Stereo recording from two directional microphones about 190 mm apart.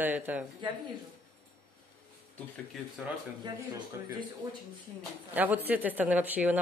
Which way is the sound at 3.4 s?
20° right (ahead or behind).